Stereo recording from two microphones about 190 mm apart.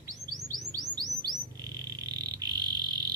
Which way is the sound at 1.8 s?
20° right (ahead or behind).